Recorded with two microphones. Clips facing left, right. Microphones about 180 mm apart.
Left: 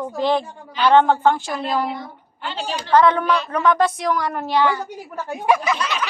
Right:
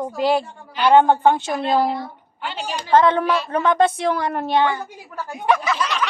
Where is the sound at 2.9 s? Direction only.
25° right (ahead or behind).